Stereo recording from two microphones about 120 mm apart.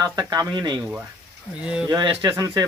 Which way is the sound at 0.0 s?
35° right (ahead or behind).